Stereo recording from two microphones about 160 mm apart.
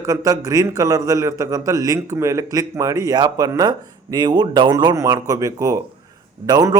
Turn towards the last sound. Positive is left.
turn(degrees=-25)  # may be behind; listen again after turning